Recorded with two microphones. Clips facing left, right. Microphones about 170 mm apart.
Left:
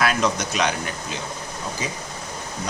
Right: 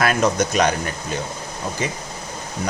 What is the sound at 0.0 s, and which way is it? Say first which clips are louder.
Speech: right 3 dB; 50° right (ahead or behind).